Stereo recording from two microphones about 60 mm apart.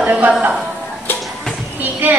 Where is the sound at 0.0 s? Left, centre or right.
Right.